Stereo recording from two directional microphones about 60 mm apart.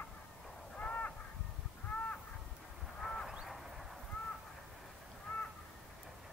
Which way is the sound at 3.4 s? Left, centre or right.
Centre.